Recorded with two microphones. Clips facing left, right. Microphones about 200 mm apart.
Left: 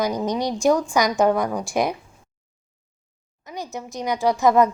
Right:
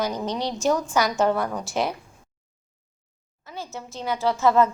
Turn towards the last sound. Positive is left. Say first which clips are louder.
# left 2 dB
turn(degrees=15)  # may be behind; listen again after turning